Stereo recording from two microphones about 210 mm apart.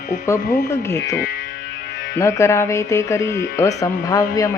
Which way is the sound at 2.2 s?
15° left (ahead or behind).